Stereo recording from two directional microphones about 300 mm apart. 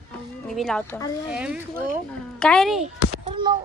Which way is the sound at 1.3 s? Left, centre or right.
Centre.